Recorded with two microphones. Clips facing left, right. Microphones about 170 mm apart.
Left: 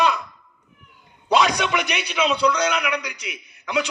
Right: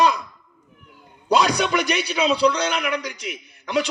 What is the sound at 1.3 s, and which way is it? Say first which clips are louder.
A man's voice: even; 35° right (ahead or behind).